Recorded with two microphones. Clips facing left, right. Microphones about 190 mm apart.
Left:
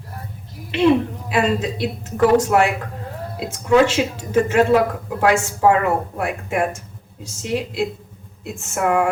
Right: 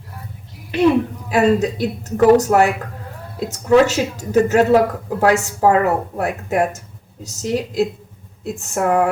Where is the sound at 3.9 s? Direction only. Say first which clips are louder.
Right 1 dB; 40° right (ahead or behind).